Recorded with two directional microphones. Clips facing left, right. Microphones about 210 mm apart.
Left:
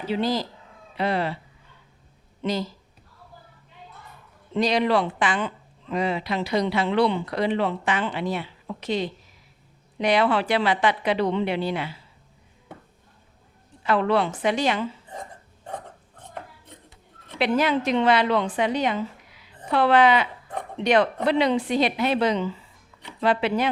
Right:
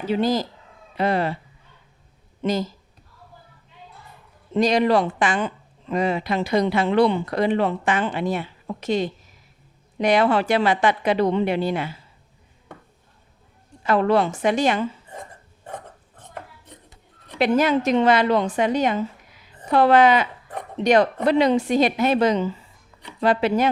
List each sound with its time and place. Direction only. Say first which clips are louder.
0.1 s speech: right 3 dB; 45° right (ahead or behind)
2.4 s speech: right 3 dB; 45° right (ahead or behind)
4.5 s speech: right 3 dB; 45° right (ahead or behind)
13.8 s speech: right 3 dB; 45° right (ahead or behind)
17.3 s a woman's voice: right 3 dB; 45° right (ahead or behind)